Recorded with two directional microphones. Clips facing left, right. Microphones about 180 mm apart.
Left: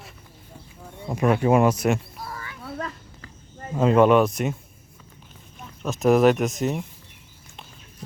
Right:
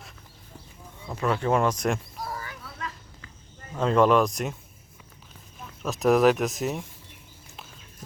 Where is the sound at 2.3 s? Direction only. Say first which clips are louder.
Right 2 dB; 30° right (ahead or behind).